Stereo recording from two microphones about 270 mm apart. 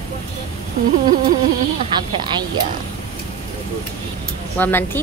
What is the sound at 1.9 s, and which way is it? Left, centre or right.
Speech, centre.